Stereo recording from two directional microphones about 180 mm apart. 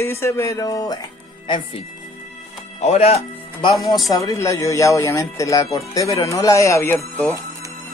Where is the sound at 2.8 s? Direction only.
35° left (ahead or behind).